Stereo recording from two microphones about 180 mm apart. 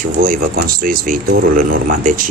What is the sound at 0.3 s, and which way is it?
Speech, 50° right (ahead or behind).